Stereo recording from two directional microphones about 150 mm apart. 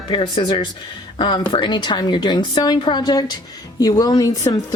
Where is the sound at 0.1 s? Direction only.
35° left (ahead or behind).